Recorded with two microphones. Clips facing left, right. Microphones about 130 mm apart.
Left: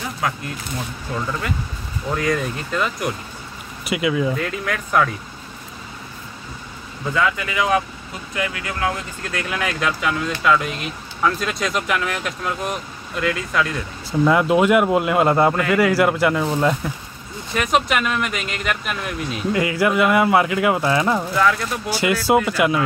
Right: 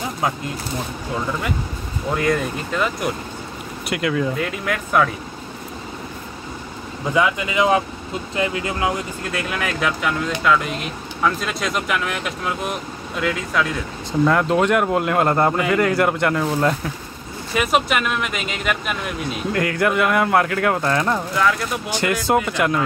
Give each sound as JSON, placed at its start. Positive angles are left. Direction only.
{"t": 0.2, "sound": "speech", "side_deg": -25}
{"t": 2.1, "sound": "speech", "side_deg": 0}
{"t": 7.2, "sound": "speech", "side_deg": -20}
{"t": 9.3, "sound": "speech", "side_deg": -5}